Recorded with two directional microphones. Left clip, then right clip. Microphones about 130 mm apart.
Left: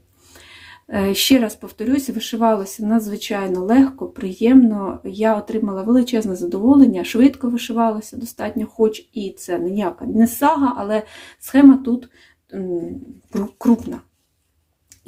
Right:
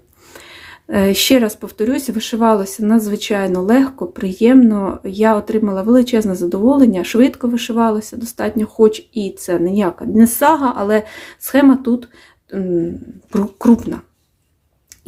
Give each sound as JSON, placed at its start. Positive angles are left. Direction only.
{"t": 0.3, "sound": "speech", "side_deg": -25}